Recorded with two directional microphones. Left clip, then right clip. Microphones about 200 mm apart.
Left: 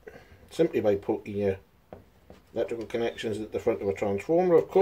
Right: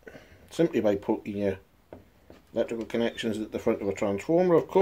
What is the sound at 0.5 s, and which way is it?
Speech, 45° right (ahead or behind).